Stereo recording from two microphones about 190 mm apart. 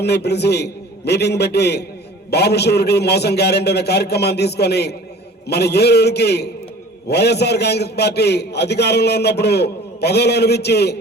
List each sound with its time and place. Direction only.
0.0 s a man's voice: 60° left (ahead or behind)